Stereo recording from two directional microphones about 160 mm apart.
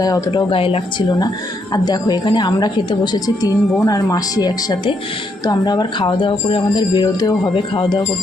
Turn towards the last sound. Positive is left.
turn(degrees=30)  # may be behind; listen again after turning